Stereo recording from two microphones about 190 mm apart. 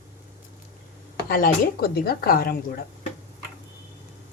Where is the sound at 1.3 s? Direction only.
50° left (ahead or behind).